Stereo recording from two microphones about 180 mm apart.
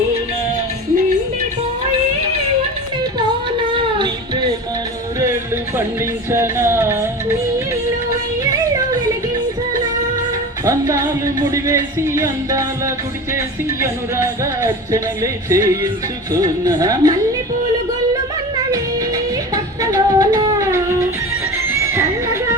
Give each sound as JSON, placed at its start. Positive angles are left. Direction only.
{"t": 3.8, "sound": "music", "side_deg": -25}
{"t": 6.3, "sound": "music", "side_deg": -15}
{"t": 10.7, "sound": "music", "side_deg": -15}
{"t": 13.8, "sound": "speech", "side_deg": -15}
{"t": 16.3, "sound": "music", "side_deg": -20}
{"t": 18.7, "sound": "music", "side_deg": -20}